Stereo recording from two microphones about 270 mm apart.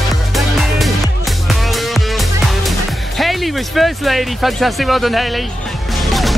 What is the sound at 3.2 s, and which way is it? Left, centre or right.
Speech, centre.